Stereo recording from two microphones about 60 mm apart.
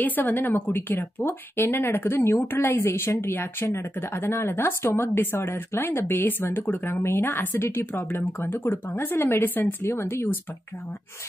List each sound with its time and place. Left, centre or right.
0.0 s speech: left
2.8 s speech: left
7.0 s speech: left